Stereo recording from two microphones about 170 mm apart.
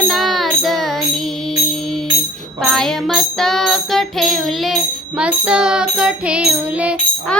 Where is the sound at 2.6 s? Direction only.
5° left (ahead or behind).